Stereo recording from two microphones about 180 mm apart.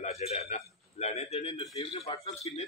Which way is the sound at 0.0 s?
35° left (ahead or behind).